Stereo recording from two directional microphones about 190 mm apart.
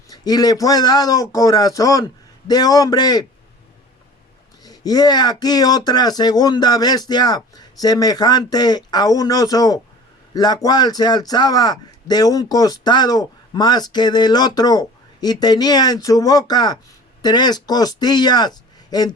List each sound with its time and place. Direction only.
0.1 s a man's voice: 20° left (ahead or behind)
4.6 s a man's voice: 20° left (ahead or behind)